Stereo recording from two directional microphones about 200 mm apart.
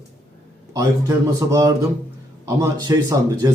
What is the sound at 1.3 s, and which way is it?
Speech, 15° right (ahead or behind).